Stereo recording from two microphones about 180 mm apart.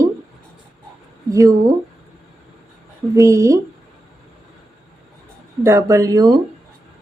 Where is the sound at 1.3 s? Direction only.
20° right (ahead or behind).